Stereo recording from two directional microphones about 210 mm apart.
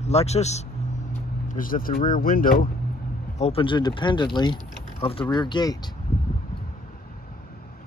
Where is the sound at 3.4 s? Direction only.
25° left (ahead or behind).